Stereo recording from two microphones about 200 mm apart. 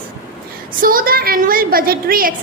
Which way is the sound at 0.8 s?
45° right (ahead or behind).